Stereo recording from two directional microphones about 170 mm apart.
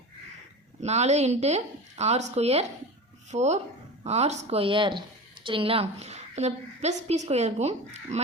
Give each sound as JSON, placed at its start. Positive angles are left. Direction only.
{"t": 0.8, "sound": "a woman's voice", "side_deg": -40}